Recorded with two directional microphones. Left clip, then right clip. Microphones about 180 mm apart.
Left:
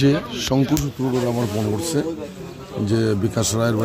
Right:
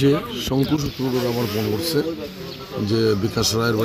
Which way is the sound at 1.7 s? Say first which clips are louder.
Right 1 dB; 30° left (ahead or behind).